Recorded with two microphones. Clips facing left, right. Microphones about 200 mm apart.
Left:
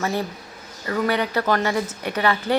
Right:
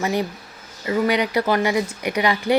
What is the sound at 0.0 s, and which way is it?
Speech, 15° right (ahead or behind).